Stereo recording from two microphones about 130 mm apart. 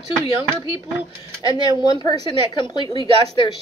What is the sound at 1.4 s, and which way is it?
Speech, 30° left (ahead or behind).